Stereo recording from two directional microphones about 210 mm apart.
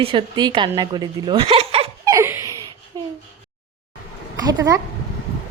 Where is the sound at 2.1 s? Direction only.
10° right (ahead or behind).